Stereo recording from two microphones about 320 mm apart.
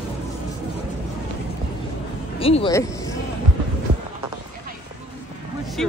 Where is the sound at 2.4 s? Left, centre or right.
Centre.